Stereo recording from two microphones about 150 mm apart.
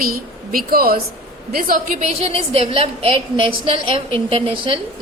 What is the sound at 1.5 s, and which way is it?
Speech, 70° right (ahead or behind).